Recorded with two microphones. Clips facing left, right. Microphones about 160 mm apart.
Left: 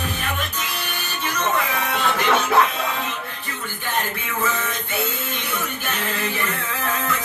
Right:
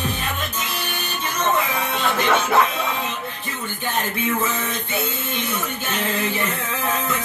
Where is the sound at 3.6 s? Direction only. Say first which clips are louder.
Right 1 dB; 25° right (ahead or behind).